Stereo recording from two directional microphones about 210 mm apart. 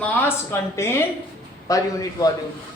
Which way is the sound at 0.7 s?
10° left (ahead or behind).